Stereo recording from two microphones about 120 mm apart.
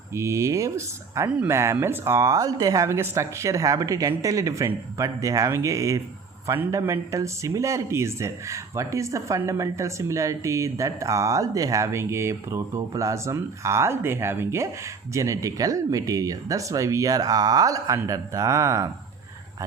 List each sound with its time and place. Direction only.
0.1 s speech: 25° right (ahead or behind)